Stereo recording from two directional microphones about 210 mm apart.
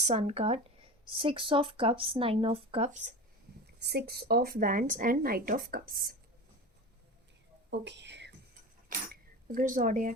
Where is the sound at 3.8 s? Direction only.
50° right (ahead or behind).